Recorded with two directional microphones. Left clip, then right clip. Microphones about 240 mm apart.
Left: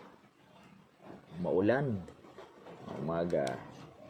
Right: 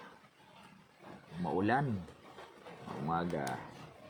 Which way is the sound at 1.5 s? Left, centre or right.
Centre.